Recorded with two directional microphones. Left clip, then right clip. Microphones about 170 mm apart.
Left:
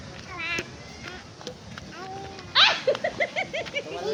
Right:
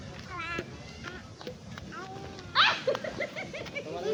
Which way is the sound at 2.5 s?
10° right (ahead or behind).